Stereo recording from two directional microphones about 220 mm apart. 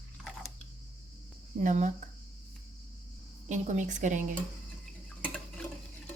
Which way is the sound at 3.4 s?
35° right (ahead or behind).